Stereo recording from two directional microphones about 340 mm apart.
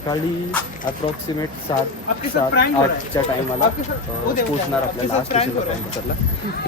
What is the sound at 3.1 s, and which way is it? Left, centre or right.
Speech, centre.